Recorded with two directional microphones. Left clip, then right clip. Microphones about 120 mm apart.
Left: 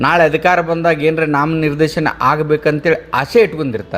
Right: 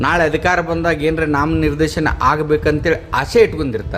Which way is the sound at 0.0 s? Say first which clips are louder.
Left 3 dB; 20° left (ahead or behind).